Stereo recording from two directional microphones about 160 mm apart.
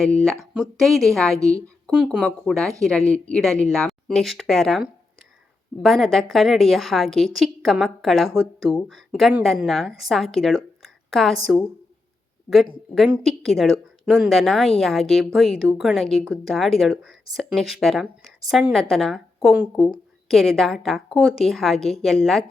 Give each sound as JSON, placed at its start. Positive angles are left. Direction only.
{"t": 0.3, "sound": "speech", "side_deg": 0}
{"t": 1.4, "sound": "a woman's voice", "side_deg": -20}
{"t": 2.2, "sound": "speech", "side_deg": 5}
{"t": 12.9, "sound": "speech", "side_deg": 0}